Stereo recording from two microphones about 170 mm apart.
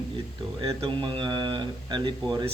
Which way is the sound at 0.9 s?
30° right (ahead or behind).